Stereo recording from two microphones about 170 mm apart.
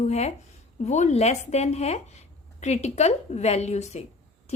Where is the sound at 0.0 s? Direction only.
40° left (ahead or behind).